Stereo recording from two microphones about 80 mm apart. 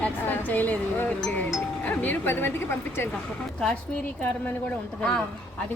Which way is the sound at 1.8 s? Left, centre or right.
Left.